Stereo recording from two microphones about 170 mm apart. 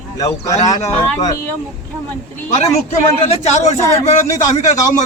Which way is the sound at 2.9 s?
40° left (ahead or behind).